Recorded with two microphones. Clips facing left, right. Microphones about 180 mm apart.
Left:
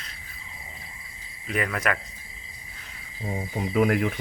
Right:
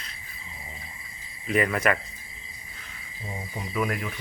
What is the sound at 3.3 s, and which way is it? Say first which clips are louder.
Speech: left 7 dB; 60° left (ahead or behind).